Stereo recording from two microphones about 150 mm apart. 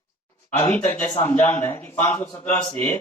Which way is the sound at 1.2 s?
15° left (ahead or behind).